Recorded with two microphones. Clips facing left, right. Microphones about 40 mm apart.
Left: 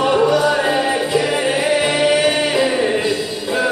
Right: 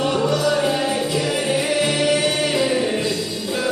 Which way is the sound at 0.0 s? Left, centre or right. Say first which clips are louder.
Left 5 dB; centre.